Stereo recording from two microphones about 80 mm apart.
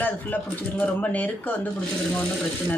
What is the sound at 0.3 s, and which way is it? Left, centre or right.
Speech, left.